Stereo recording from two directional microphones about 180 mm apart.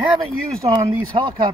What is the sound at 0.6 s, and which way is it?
Speech, 20° right (ahead or behind).